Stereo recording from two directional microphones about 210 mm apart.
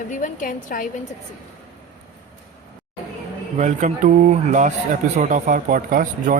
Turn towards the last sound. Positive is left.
turn(degrees=-40)  # may be behind; listen again after turning